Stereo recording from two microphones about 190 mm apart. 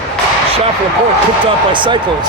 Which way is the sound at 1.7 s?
25° right (ahead or behind).